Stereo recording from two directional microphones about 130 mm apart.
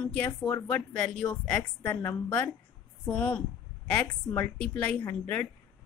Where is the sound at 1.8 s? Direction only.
15° left (ahead or behind).